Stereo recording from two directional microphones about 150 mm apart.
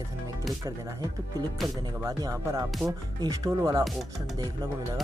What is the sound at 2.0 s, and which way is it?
Speech, 25° right (ahead or behind).